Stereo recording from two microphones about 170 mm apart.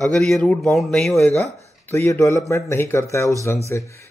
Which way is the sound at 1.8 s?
15° left (ahead or behind).